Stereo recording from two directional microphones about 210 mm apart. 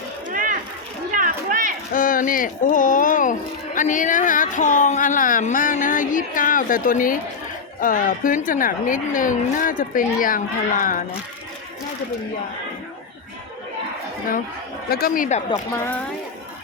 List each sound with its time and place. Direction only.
0.3 s mechanisms: 40° right (ahead or behind)
1.1 s a sound: 40° right (ahead or behind)
1.9 s speech: 40° left (ahead or behind)
14.8 s speech: 45° left (ahead or behind)